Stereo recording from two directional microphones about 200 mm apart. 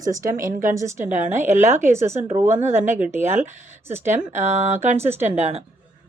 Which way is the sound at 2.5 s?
35° right (ahead or behind).